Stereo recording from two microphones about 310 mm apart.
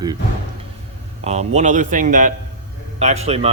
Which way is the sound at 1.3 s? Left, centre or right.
Right.